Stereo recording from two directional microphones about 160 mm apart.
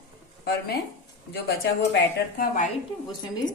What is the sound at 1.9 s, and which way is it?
Speech, 70° left (ahead or behind).